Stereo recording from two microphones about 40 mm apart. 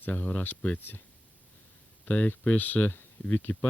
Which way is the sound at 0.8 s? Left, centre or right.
Left.